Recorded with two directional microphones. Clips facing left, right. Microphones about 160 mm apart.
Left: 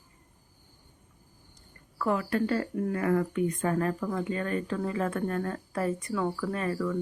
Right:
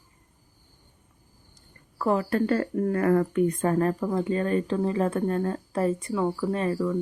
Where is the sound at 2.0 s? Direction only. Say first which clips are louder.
Right 4 dB; 35° right (ahead or behind).